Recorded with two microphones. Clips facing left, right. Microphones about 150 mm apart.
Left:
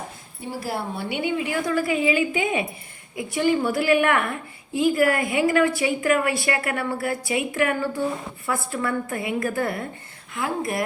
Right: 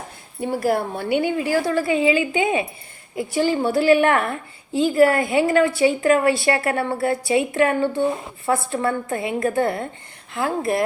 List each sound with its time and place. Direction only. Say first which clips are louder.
0.4 s a woman's voice: right 8 dB; 55° right (ahead or behind); by 10.8 s 30° right (ahead or behind)